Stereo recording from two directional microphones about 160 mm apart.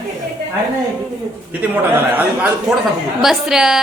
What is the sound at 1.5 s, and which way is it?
A man's voice, 10° right (ahead or behind).